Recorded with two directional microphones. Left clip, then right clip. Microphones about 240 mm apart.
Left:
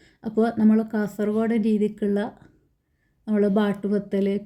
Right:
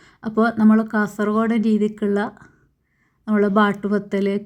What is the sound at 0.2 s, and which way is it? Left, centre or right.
Speech, centre.